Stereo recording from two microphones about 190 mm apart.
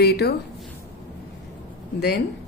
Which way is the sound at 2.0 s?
60° left (ahead or behind).